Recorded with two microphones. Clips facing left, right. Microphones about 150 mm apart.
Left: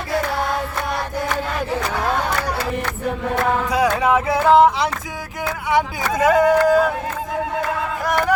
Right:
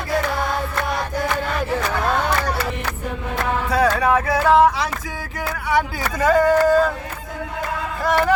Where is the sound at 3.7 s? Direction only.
15° left (ahead or behind).